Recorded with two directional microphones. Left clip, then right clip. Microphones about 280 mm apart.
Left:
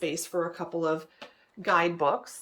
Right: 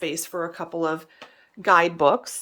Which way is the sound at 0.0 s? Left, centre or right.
Centre.